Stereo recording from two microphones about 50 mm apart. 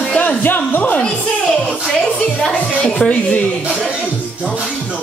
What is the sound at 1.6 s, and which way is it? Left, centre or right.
Music, centre.